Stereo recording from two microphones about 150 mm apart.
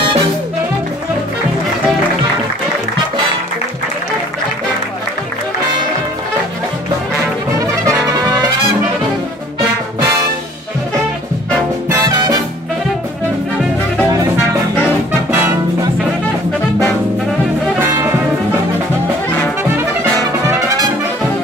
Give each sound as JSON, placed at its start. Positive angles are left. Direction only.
{"t": 8.1, "sound": "trumpet", "side_deg": -25}
{"t": 12.1, "sound": "music", "side_deg": -30}
{"t": 15.3, "sound": "music", "side_deg": -15}